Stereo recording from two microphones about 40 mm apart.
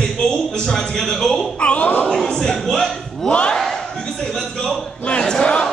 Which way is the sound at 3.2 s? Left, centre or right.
Left.